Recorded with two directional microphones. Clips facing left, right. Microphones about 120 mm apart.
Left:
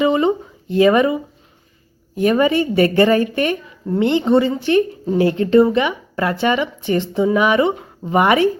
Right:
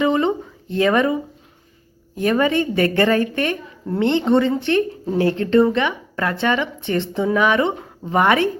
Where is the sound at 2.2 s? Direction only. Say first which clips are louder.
Left 3 dB; 15° left (ahead or behind).